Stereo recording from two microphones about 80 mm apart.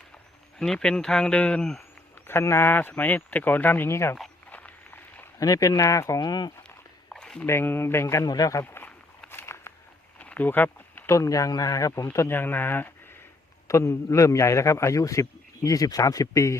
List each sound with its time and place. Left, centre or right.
0.6 s speech: centre
2.1 s speech: left
5.4 s speech: left
6.2 s speech: left
7.1 s walk: centre
7.4 s a man's voice: left
8.2 s speech: left
8.6 s a sound: left
10.2 s a sound: centre
11.0 s speech: left
12.3 s speech: left
13.7 s a man's voice: left